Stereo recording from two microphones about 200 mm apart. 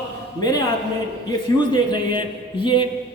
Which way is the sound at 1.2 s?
20° left (ahead or behind).